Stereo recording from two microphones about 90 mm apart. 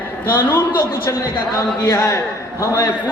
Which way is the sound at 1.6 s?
35° left (ahead or behind).